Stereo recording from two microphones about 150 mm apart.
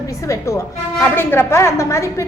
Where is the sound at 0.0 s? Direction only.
20° left (ahead or behind).